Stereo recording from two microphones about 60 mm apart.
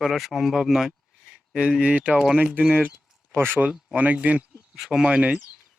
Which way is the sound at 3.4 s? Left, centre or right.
Right.